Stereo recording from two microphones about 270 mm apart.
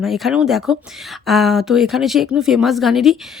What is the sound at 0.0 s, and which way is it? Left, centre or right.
A woman's voice, centre.